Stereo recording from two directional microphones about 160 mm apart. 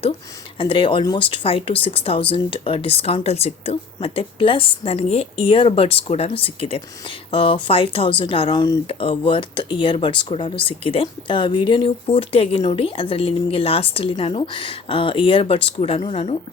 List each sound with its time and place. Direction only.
0.6 s speech: 30° left (ahead or behind)